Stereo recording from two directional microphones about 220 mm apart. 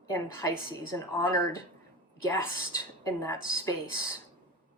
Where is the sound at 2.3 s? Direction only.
15° left (ahead or behind).